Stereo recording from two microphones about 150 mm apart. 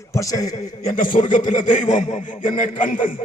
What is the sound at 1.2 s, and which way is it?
A man's voice, 50° left (ahead or behind).